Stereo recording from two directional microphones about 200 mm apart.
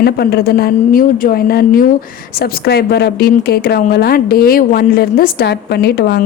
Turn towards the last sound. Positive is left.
turn(degrees=55)  # may be behind; listen again after turning